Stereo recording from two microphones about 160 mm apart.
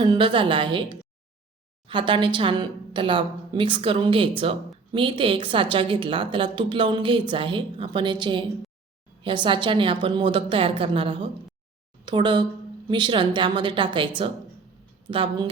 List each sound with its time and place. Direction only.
0.0 s a woman's voice: 30° right (ahead or behind)
15.1 s a woman's voice: 35° right (ahead or behind)